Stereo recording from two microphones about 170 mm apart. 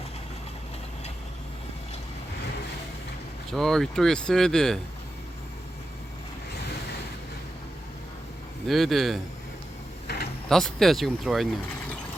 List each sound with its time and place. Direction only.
3.5 s speech: centre (ahead or behind)
8.6 s speech: centre (ahead or behind)
10.5 s speech: centre (ahead or behind)